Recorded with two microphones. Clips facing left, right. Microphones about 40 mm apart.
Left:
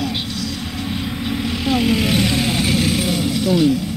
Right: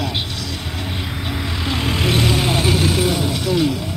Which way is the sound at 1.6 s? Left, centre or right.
Right.